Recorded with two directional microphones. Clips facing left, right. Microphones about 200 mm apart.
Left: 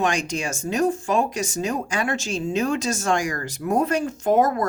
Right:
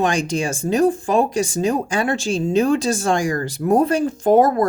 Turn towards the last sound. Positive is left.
turn(degrees=-30)  # may be behind; listen again after turning